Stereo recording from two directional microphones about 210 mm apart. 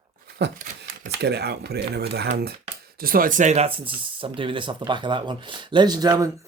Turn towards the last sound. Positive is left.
turn(degrees=-15)  # may be behind; listen again after turning